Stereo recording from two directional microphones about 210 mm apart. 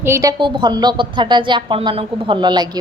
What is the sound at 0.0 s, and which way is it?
A woman's voice, 15° right (ahead or behind).